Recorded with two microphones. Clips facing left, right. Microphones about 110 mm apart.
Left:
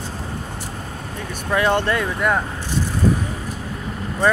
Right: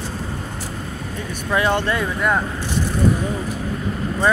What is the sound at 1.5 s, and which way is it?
Speech, 50° left (ahead or behind).